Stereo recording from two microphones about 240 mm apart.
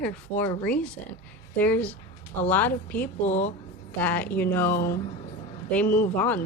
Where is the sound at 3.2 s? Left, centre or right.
Left.